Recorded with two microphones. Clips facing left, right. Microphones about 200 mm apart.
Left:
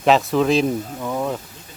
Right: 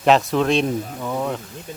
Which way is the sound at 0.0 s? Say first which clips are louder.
Even; centre (ahead or behind).